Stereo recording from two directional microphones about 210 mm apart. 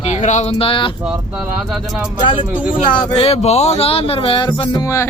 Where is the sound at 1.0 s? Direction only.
5° right (ahead or behind).